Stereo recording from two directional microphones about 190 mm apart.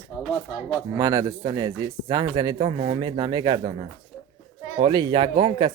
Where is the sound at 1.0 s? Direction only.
15° right (ahead or behind).